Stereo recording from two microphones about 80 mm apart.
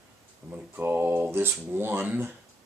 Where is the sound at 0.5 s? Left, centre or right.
Right.